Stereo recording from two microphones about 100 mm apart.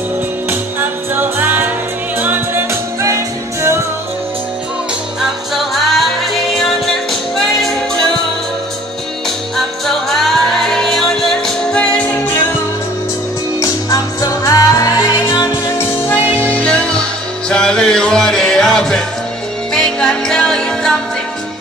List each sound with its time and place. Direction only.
0.5 s music: 20° right (ahead or behind)
5.2 s music: centre (ahead or behind)
9.6 s music: centre (ahead or behind)
13.6 s music: 40° left (ahead or behind)
16.3 s music: 15° left (ahead or behind)